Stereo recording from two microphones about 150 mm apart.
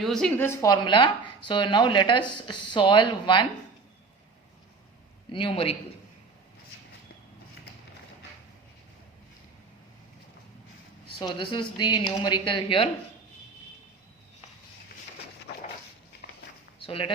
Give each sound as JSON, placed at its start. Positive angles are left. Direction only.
{"t": 0.0, "sound": "a woman's voice", "side_deg": 0}
{"t": 0.3, "sound": "speech", "side_deg": 15}
{"t": 5.3, "sound": "speech", "side_deg": 35}
{"t": 11.2, "sound": "speech", "side_deg": 30}
{"t": 16.8, "sound": "speech", "side_deg": 35}